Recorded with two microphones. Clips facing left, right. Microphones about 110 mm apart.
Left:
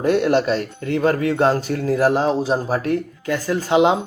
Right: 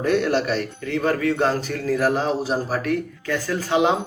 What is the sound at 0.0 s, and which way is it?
A man's voice, 25° left (ahead or behind).